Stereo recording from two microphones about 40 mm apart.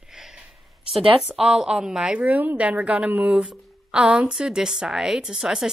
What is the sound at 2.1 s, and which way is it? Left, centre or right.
A woman's voice, right.